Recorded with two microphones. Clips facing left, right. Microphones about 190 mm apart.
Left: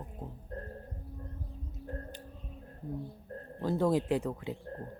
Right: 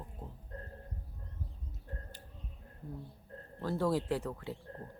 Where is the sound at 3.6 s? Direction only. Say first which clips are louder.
Left 4 dB; 20° left (ahead or behind).